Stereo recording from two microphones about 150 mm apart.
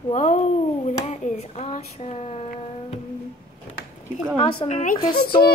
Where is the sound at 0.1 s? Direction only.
50° left (ahead or behind).